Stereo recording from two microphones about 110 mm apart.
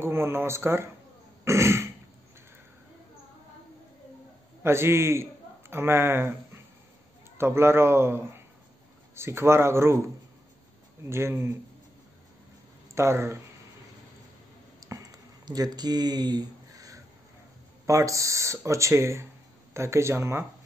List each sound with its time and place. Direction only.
0.0 s speech: 20° right (ahead or behind)
1.4 s throat clearing: 25° right (ahead or behind)
4.6 s a man's voice: 25° right (ahead or behind)
12.9 s speech: 25° right (ahead or behind)
14.8 s a sound: 30° right (ahead or behind)
17.8 s speech: 30° right (ahead or behind)